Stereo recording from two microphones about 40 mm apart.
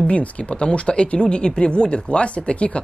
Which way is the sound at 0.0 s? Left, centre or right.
Left.